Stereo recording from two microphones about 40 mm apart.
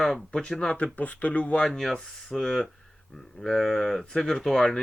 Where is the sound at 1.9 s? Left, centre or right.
Centre.